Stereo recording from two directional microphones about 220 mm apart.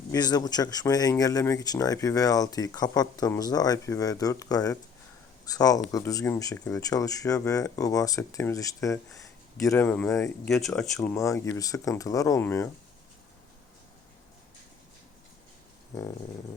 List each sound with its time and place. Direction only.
0.1 s speech: 15° left (ahead or behind)